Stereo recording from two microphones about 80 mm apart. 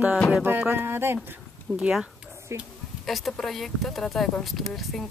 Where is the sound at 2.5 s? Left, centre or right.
Right.